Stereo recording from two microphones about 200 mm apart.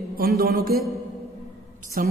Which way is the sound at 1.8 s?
45° right (ahead or behind).